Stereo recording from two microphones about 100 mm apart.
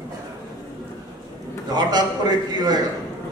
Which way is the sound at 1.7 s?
45° right (ahead or behind).